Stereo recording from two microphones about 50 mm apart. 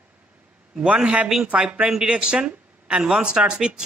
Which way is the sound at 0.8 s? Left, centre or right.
Right.